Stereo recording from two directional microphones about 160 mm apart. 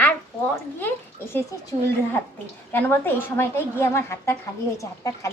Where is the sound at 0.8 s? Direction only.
15° left (ahead or behind).